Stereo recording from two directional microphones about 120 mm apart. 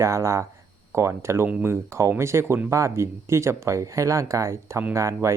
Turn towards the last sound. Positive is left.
turn(degrees=-25)  # may be behind; listen again after turning